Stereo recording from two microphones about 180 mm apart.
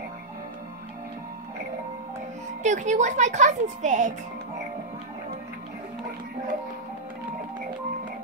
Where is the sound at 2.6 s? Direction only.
40° right (ahead or behind).